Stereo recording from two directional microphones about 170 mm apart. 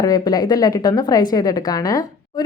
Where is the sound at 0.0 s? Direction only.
20° left (ahead or behind).